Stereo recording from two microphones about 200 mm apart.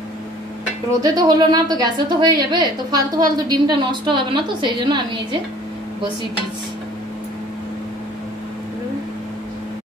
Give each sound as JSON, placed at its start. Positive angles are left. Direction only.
{"t": 1.0, "sound": "a woman's voice", "side_deg": -20}